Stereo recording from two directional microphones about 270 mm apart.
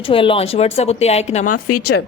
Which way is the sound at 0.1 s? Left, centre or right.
Centre.